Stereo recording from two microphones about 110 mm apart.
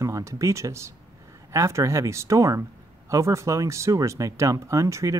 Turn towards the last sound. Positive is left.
turn(degrees=-30)  # may be behind; listen again after turning